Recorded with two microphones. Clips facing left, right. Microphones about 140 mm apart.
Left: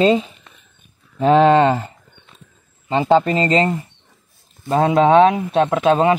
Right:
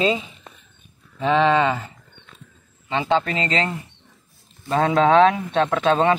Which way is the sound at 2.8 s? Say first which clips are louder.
Left 6 dB; 35° left (ahead or behind).